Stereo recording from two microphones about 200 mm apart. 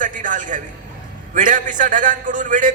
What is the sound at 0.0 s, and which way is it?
A man's voice, 40° right (ahead or behind).